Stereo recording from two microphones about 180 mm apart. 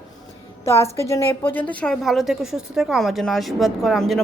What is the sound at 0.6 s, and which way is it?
A woman's voice, 15° left (ahead or behind).